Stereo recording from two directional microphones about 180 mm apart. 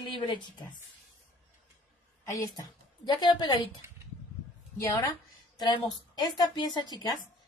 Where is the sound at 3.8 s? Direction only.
15° right (ahead or behind).